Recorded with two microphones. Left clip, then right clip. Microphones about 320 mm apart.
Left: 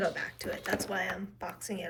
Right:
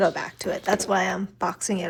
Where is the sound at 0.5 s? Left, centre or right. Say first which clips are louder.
Right 11 dB; right.